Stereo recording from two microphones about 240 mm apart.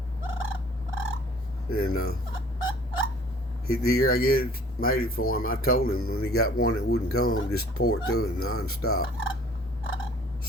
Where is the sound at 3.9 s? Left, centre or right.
Left.